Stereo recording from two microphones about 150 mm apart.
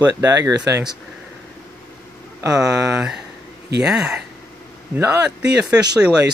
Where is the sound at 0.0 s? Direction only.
20° right (ahead or behind).